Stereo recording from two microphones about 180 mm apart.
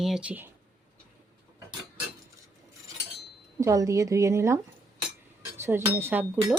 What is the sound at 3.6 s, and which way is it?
Speech, 15° right (ahead or behind).